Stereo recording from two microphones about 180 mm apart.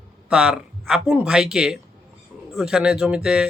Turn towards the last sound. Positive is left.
turn(degrees=-5)  # may be behind; listen again after turning